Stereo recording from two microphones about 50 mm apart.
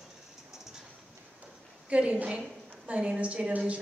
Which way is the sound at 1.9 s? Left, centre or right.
Right.